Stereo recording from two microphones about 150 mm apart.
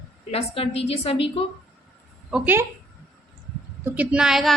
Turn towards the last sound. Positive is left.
turn(degrees=0)  # may be behind; listen again after turning